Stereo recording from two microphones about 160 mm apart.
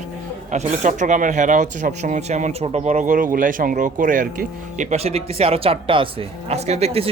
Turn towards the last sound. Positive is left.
turn(degrees=-40)  # may be behind; listen again after turning